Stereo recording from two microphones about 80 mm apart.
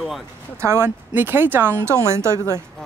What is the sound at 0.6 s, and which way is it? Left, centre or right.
Speech, right.